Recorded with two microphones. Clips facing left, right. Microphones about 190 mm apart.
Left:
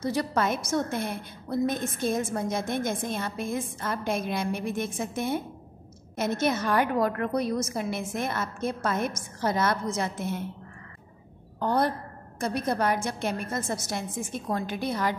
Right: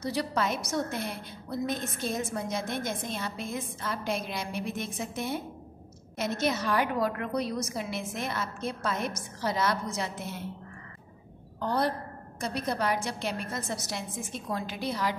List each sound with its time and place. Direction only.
0.0 s a woman's voice: 50° left (ahead or behind)
11.6 s a woman's voice: 50° left (ahead or behind)